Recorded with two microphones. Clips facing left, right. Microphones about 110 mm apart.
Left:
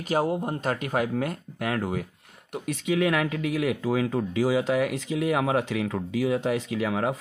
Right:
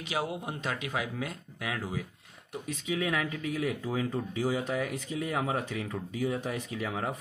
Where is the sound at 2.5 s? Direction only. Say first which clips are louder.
Left 7 dB; 70° left (ahead or behind).